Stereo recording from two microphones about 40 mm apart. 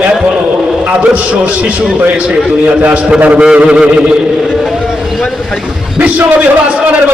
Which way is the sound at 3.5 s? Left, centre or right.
Right.